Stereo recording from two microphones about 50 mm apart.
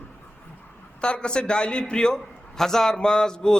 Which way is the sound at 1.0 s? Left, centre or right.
Centre.